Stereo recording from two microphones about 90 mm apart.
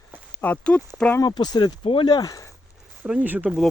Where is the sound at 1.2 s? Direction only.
50° left (ahead or behind); by 2.0 s 75° left (ahead or behind).